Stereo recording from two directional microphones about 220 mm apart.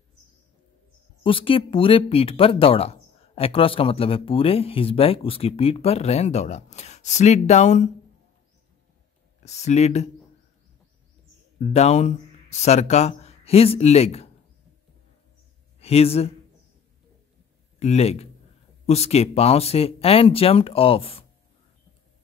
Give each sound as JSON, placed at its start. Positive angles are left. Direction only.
{"t": 1.2, "sound": "speech", "side_deg": 25}
{"t": 9.4, "sound": "speech", "side_deg": 30}
{"t": 11.7, "sound": "speech", "side_deg": 30}
{"t": 15.8, "sound": "speech", "side_deg": 25}
{"t": 17.7, "sound": "speech", "side_deg": 30}